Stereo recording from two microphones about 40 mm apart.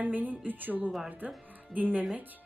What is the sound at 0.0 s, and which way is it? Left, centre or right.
Speech, right.